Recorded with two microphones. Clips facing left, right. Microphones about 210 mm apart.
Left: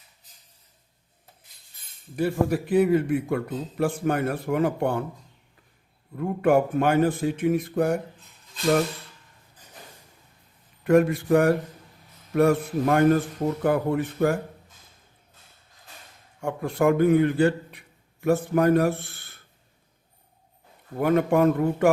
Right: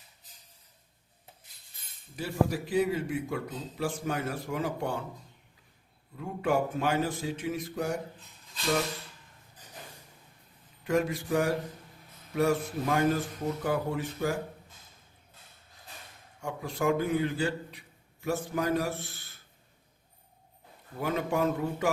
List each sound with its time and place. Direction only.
2.1 s a man's voice: 55° left (ahead or behind)
6.1 s a man's voice: 55° left (ahead or behind)
10.8 s a man's voice: 60° left (ahead or behind)
16.4 s a man's voice: 55° left (ahead or behind)
21.0 s a man's voice: 55° left (ahead or behind)